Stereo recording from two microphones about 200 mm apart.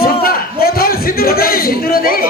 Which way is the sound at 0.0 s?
50° left (ahead or behind).